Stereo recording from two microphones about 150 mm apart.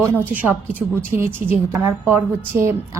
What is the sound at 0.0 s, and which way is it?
A woman's voice, 10° right (ahead or behind).